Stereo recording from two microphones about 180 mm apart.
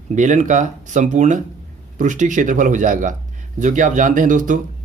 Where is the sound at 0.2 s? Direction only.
45° right (ahead or behind).